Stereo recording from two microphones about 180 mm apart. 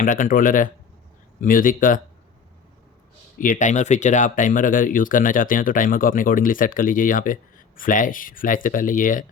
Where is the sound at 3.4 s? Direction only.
45° left (ahead or behind).